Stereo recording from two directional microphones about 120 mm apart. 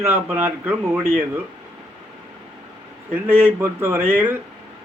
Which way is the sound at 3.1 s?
20° right (ahead or behind).